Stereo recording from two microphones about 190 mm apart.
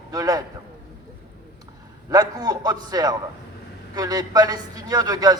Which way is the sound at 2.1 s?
20° right (ahead or behind).